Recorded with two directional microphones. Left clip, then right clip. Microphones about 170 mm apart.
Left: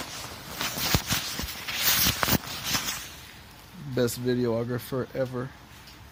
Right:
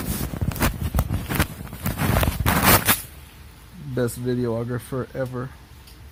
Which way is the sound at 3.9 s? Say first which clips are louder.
Right 1 dB; centre (ahead or behind).